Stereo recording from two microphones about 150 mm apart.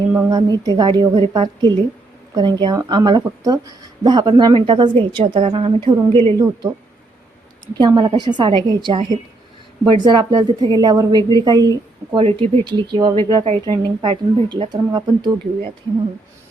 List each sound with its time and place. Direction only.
0.3 s speech: 25° right (ahead or behind)
12.2 s speech: 35° right (ahead or behind)